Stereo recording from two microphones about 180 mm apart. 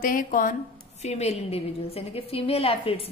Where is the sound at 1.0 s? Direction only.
40° left (ahead or behind).